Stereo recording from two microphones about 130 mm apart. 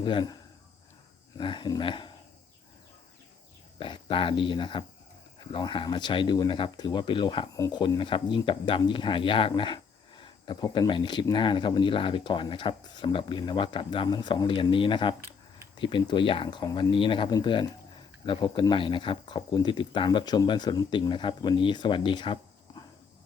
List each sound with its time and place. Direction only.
0.0 s speech: 40° left (ahead or behind)
1.4 s speech: 40° left (ahead or behind)
3.8 s speech: 40° left (ahead or behind)